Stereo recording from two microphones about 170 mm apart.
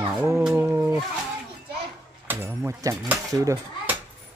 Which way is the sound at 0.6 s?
15° right (ahead or behind).